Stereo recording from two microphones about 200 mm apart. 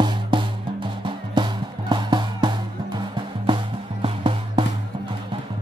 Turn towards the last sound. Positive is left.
turn(degrees=-25)  # may be behind; listen again after turning